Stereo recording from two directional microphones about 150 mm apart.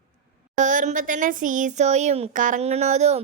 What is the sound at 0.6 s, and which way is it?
Speech, 55° right (ahead or behind).